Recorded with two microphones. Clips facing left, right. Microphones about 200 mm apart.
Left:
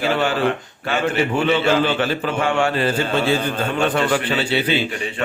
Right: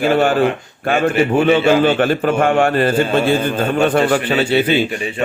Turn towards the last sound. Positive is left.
turn(degrees=-45)  # may be behind; listen again after turning